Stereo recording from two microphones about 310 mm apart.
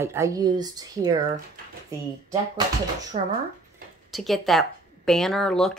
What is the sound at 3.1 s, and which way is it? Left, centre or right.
Speech, right.